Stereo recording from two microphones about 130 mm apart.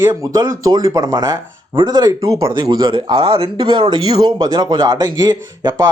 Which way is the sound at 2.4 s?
40° right (ahead or behind).